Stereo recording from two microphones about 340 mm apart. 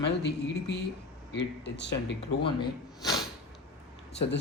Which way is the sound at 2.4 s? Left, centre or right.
Centre.